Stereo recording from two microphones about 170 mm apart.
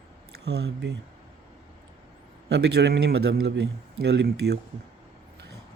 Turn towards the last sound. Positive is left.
turn(degrees=-85)